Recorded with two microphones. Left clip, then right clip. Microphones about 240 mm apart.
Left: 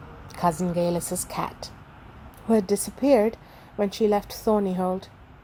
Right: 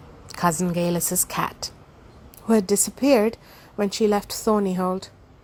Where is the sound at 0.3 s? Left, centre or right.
Right.